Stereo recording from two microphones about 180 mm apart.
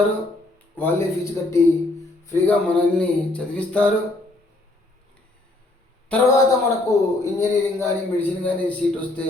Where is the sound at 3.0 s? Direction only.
5° left (ahead or behind).